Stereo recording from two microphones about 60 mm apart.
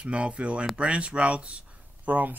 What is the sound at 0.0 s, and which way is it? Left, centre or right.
Speech, centre.